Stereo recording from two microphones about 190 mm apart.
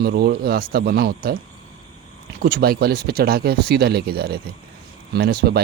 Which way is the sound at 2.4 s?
50° right (ahead or behind).